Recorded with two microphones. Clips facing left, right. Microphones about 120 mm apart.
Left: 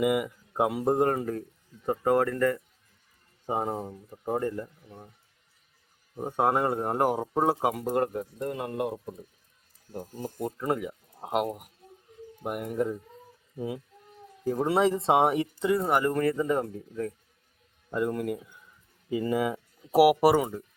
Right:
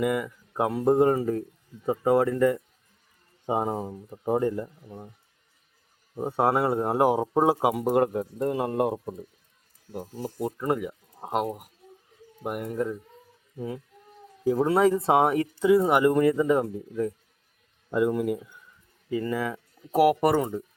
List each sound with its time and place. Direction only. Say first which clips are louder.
0.0 s speech: left 1 dB; 10° left (ahead or behind); by 2.6 s 10° right (ahead or behind)
3.6 s speech: right 3 dB; 5° right (ahead or behind)
6.1 s speech: right 2 dB; 10° right (ahead or behind)
8.4 s speech: right 6 dB; 30° right (ahead or behind)
9.9 s speech: right 2 dB; 10° right (ahead or behind)
15.7 s speech: right 6 dB; 10° right (ahead or behind)
19.1 s speech: left 1 dB; 20° left (ahead or behind)